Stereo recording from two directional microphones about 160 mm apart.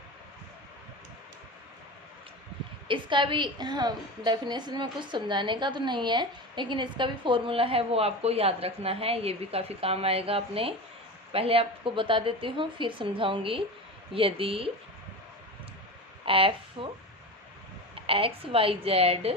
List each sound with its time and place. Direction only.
2.8 s a woman's voice: 30° right (ahead or behind)
16.2 s a woman's voice: 35° right (ahead or behind)
18.0 s a woman's voice: 35° right (ahead or behind)